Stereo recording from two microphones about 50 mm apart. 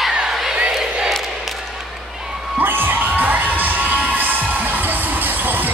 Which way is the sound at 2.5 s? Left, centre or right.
Right.